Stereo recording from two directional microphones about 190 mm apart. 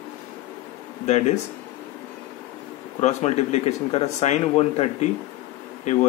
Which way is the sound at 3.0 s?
35° left (ahead or behind).